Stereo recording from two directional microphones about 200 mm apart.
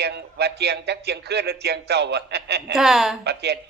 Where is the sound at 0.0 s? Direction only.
55° right (ahead or behind).